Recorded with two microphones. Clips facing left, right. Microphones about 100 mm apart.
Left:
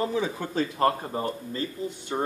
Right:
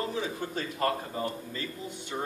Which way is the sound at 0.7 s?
35° left (ahead or behind).